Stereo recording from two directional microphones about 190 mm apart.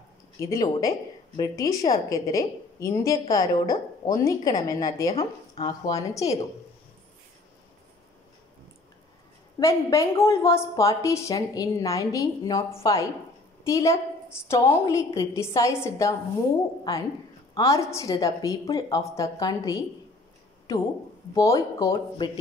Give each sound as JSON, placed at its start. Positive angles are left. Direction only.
{"t": 0.4, "sound": "a woman's voice", "side_deg": 15}
{"t": 5.1, "sound": "speech", "side_deg": 30}
{"t": 5.7, "sound": "a woman's voice", "side_deg": 15}
{"t": 9.6, "sound": "a woman's voice", "side_deg": 15}
{"t": 17.6, "sound": "a woman's voice", "side_deg": 15}